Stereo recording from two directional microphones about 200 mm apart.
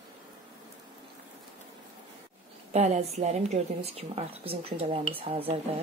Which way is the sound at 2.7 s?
35° right (ahead or behind).